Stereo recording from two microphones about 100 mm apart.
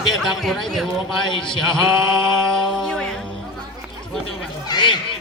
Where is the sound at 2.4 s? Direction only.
5° left (ahead or behind).